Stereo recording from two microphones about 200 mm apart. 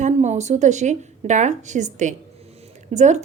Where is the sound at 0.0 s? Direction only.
35° right (ahead or behind).